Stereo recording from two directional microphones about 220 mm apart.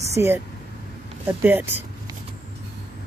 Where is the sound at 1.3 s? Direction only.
10° right (ahead or behind).